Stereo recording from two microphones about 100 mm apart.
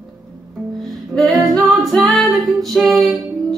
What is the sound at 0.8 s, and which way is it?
Music, centre (ahead or behind).